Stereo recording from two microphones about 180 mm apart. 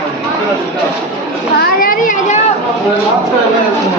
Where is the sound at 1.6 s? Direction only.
50° left (ahead or behind).